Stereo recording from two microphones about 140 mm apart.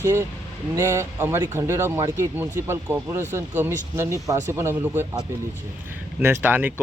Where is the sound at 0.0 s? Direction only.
20° right (ahead or behind).